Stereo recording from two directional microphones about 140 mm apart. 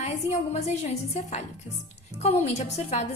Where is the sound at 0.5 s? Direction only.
50° left (ahead or behind).